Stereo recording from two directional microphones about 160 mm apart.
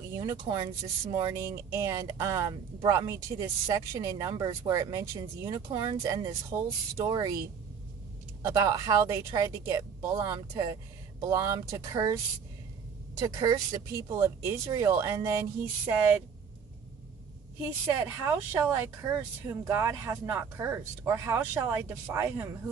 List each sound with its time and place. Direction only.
0.1 s a woman's voice: 25° right (ahead or behind)
8.4 s a woman's voice: 20° right (ahead or behind)
13.4 s a woman's voice: 25° right (ahead or behind)
17.6 s speech: 15° right (ahead or behind)